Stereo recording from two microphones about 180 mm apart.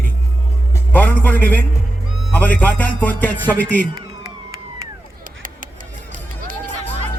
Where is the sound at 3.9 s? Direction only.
20° right (ahead or behind).